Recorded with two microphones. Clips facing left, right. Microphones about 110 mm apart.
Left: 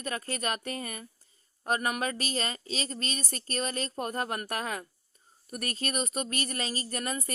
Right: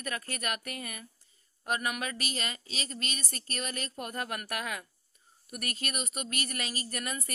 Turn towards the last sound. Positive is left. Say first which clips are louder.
# left 3 dB
turn(degrees=35)  # may be behind; listen again after turning